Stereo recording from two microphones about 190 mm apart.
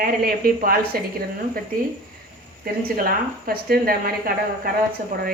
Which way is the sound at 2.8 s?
50° right (ahead or behind).